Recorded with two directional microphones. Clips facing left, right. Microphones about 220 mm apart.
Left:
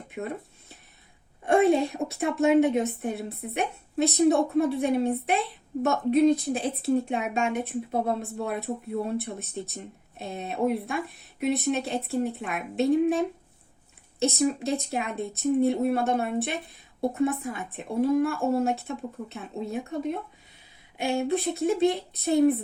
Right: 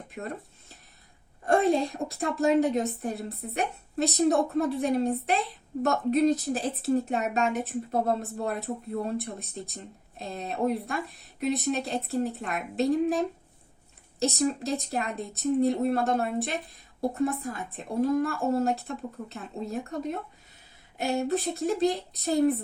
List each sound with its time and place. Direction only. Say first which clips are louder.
0.1 s speech: left 3 dB; centre (ahead or behind)
1.5 s speech: left 3 dB; 5° left (ahead or behind)